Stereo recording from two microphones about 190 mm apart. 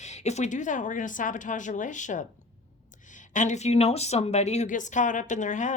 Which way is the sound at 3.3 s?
40° left (ahead or behind).